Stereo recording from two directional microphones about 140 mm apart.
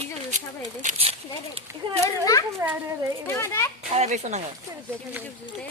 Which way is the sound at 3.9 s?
50° right (ahead or behind).